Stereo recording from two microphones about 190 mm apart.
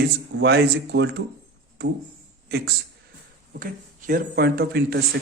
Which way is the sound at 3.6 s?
45° right (ahead or behind).